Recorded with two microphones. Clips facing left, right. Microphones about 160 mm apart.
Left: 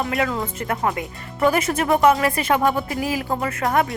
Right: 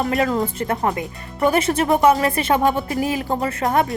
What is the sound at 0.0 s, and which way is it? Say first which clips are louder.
Speech: right 3 dB; 40° right (ahead or behind).